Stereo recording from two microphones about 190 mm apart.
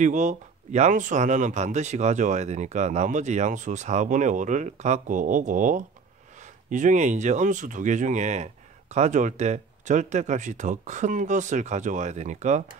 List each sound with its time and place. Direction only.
0.0 s speech: 40° right (ahead or behind)